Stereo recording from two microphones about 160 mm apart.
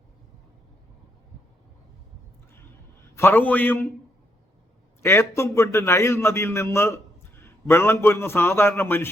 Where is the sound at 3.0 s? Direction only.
15° left (ahead or behind).